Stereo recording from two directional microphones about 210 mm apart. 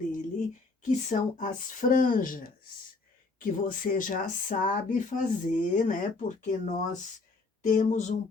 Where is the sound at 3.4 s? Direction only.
40° left (ahead or behind).